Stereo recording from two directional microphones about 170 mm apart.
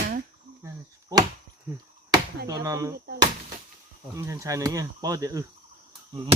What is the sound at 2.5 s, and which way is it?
Speech, 20° right (ahead or behind).